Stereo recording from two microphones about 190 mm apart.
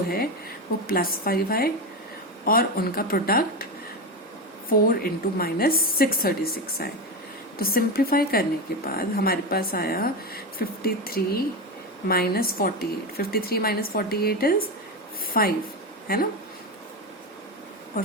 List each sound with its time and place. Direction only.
0.9 s a woman's voice: 50° left (ahead or behind)
4.7 s a woman's voice: 50° left (ahead or behind)